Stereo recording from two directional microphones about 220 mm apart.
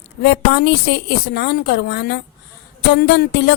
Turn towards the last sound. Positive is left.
turn(degrees=50)  # may be behind; listen again after turning